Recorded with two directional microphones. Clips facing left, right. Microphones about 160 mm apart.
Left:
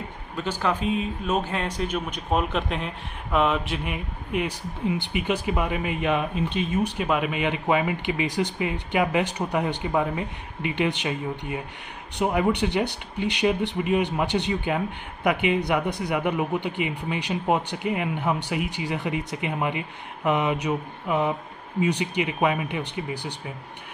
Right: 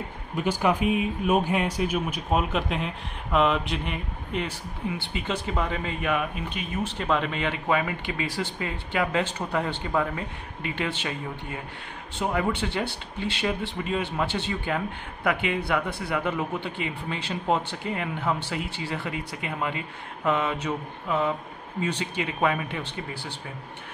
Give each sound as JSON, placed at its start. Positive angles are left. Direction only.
{"t": 0.4, "sound": "speech", "side_deg": -15}
{"t": 6.8, "sound": "speech", "side_deg": 10}